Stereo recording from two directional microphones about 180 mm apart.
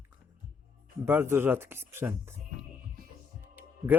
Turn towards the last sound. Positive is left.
turn(degrees=-10)  # may be behind; listen again after turning